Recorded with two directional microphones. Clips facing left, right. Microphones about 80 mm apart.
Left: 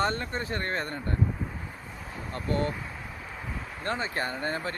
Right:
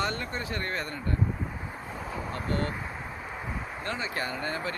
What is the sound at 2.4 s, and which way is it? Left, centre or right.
Speech, right.